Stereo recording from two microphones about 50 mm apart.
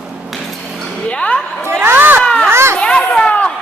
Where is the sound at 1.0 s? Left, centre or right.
Left.